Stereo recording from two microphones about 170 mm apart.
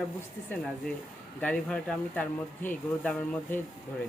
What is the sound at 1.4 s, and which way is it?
Speech, 5° left (ahead or behind).